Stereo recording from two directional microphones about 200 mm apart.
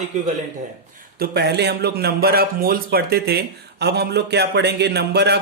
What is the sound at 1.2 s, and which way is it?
Speech, 55° right (ahead or behind).